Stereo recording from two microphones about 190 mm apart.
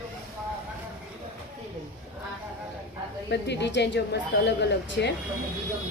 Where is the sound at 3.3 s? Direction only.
65° left (ahead or behind).